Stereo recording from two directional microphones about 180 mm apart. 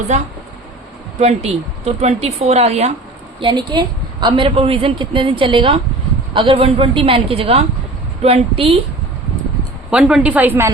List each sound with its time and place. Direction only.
0.1 s speech: 35° right (ahead or behind)
3.4 s a woman's voice: 25° right (ahead or behind)
9.9 s a woman's voice: 5° right (ahead or behind)